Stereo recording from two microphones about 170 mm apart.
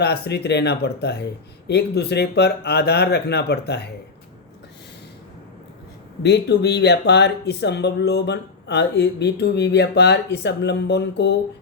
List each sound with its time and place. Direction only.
0.0 s speech: 75° left (ahead or behind)
6.2 s speech: 80° left